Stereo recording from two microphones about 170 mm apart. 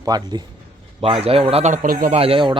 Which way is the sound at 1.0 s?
35° right (ahead or behind).